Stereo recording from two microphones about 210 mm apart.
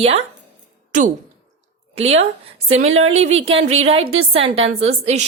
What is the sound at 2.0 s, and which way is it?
A woman's voice, 30° right (ahead or behind).